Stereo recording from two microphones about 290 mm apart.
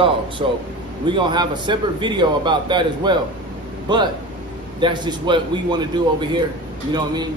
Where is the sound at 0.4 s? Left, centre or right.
Centre.